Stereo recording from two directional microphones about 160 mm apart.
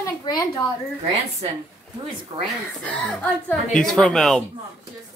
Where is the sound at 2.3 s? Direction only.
30° right (ahead or behind).